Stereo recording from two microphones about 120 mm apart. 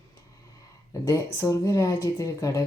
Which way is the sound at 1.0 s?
25° left (ahead or behind).